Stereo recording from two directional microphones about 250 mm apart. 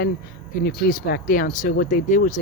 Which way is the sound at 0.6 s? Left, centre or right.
Left.